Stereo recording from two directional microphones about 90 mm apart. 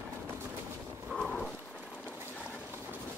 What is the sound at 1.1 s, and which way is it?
Dog, 5° left (ahead or behind).